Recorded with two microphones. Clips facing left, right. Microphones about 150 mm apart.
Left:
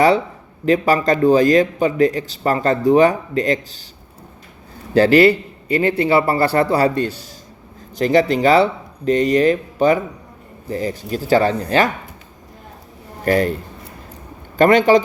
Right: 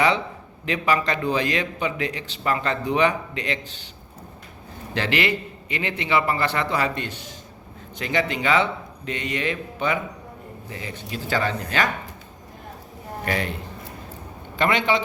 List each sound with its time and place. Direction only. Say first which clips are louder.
0.6 s a man's voice: left 8 dB; 40° left (ahead or behind)
4.9 s a man's voice: left 13 dB; 35° left (ahead or behind)
13.2 s a man's voice: left 10 dB; 40° left (ahead or behind)
14.6 s a man's voice: left 10 dB; 45° left (ahead or behind)